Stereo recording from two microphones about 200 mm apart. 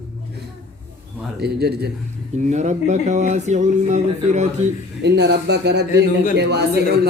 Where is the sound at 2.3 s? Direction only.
35° right (ahead or behind).